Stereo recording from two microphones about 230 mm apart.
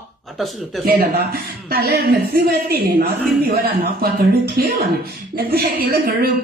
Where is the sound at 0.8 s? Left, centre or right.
Right.